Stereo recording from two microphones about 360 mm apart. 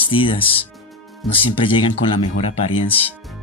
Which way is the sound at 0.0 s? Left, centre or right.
Centre.